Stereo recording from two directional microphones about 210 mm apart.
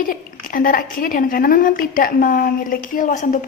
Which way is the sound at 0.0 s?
40° left (ahead or behind).